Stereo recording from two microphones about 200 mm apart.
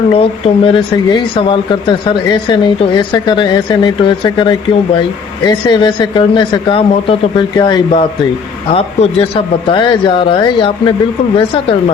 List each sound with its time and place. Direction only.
0.1 s speech: 25° left (ahead or behind)